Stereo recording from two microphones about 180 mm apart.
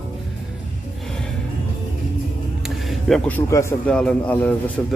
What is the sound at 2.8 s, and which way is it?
A man's voice, centre (ahead or behind).